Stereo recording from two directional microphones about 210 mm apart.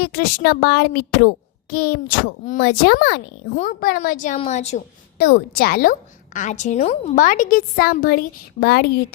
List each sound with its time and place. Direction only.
0.0 s a woman's voice: 45° left (ahead or behind)
3.5 s a woman's voice: 40° left (ahead or behind)
5.1 s a woman's voice: 50° left (ahead or behind)